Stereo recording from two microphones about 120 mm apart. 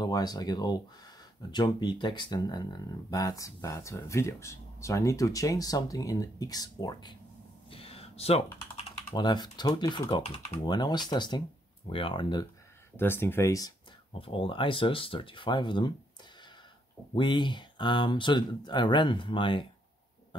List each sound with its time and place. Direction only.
0.0 s speech: 35° left (ahead or behind)
7.7 s a sound: 55° left (ahead or behind)
9.1 s speech: 35° left (ahead or behind)
12.9 s speech: 20° left (ahead or behind)
14.1 s speech: 50° left (ahead or behind)
17.1 s speech: 40° left (ahead or behind)